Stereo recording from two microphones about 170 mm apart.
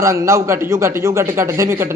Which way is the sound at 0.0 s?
15° right (ahead or behind).